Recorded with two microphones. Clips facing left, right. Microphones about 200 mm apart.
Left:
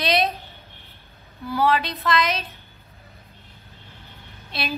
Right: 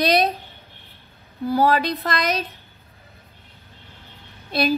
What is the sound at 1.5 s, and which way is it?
Speech, 40° right (ahead or behind).